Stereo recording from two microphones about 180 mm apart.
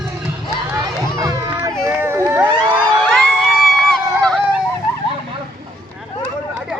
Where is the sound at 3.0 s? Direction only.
Centre (ahead or behind).